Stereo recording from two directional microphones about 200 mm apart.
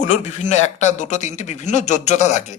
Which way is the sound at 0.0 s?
35° left (ahead or behind).